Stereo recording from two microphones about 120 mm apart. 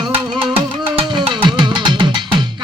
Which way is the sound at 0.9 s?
45° right (ahead or behind).